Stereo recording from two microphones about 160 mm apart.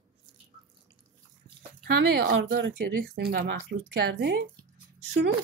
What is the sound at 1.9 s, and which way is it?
Speech, 85° right.